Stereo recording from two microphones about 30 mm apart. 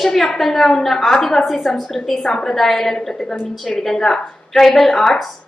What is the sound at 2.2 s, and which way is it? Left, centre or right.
Speech, centre.